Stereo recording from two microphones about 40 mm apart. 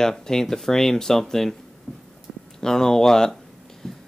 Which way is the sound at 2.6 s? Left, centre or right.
Centre.